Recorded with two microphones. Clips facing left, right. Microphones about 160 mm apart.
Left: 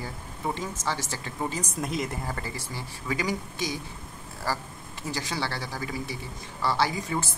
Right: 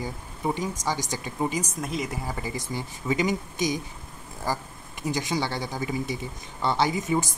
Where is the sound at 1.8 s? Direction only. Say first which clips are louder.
Even; centre (ahead or behind).